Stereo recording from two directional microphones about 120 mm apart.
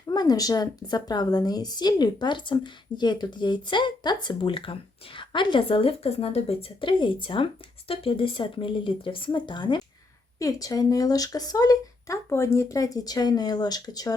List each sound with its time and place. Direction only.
0.1 s a woman's voice: 35° left (ahead or behind)
10.3 s a woman's voice: 30° left (ahead or behind)